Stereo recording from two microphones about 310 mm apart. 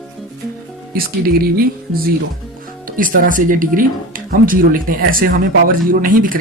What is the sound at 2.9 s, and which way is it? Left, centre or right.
Speech, right.